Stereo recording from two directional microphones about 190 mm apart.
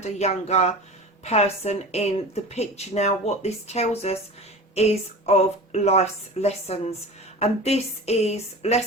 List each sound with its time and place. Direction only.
0.0 s a woman's voice: 35° left (ahead or behind)